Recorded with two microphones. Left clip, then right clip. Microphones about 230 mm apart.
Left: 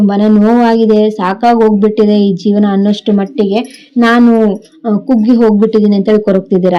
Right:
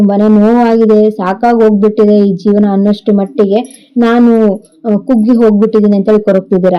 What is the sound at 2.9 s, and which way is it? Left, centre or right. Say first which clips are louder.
Speech: right 2 dB; left.